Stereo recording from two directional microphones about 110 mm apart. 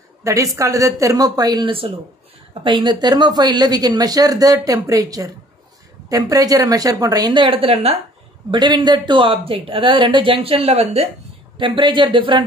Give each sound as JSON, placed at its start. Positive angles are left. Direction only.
{"t": 0.2, "sound": "speech", "side_deg": -30}
{"t": 7.3, "sound": "speech", "side_deg": -50}
{"t": 8.5, "sound": "speech", "side_deg": -45}
{"t": 11.5, "sound": "speech", "side_deg": -45}